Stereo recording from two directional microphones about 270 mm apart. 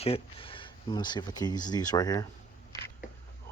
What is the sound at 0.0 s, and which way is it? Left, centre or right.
Speech, centre.